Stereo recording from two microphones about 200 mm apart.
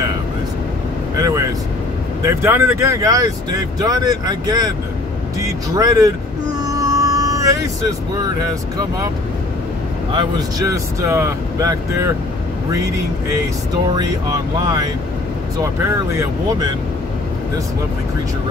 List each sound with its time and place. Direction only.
1.2 s vehicle: 15° right (ahead or behind)
2.2 s speech: 15° right (ahead or behind)
5.8 s speech: 20° right (ahead or behind)
6.6 s music: 15° right (ahead or behind)
8.2 s speech: 20° right (ahead or behind)
10.1 s speech: 15° right (ahead or behind)
14.6 s speech: 20° right (ahead or behind)